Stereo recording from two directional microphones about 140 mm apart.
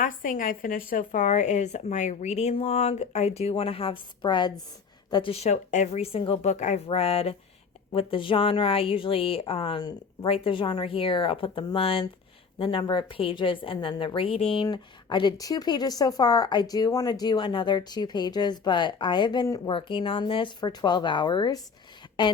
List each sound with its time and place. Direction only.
0.0 s speech: 75° left (ahead or behind); by 6.8 s 55° left (ahead or behind)
6.8 s a woman's voice: 45° left (ahead or behind)